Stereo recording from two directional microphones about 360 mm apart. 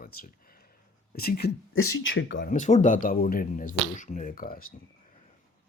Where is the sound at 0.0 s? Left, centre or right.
Left.